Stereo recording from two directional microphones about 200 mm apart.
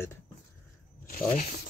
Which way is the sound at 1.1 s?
40° left (ahead or behind).